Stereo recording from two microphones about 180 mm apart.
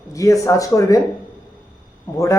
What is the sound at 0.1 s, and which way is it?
Speech, 15° left (ahead or behind).